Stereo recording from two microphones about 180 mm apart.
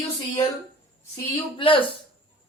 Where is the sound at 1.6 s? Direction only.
30° left (ahead or behind).